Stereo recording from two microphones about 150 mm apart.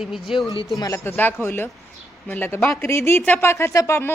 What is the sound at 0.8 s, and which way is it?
Speech, 20° left (ahead or behind).